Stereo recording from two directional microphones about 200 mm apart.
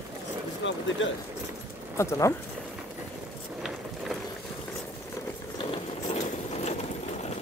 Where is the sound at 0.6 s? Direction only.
65° left (ahead or behind).